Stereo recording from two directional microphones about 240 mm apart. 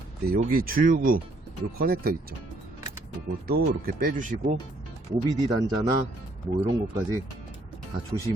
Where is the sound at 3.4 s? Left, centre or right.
Right.